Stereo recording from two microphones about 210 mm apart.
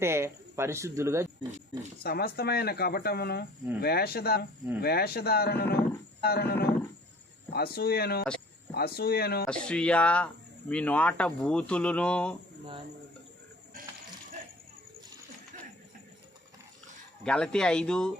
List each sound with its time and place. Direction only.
0.0 s speech: 10° right (ahead or behind)
2.0 s speech: 45° left (ahead or behind)
9.5 s speech: 5° left (ahead or behind)
13.7 s mechanisms: 40° right (ahead or behind)
17.2 s speech: 5° left (ahead or behind)